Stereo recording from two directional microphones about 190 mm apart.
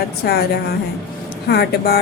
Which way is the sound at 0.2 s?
60° left (ahead or behind).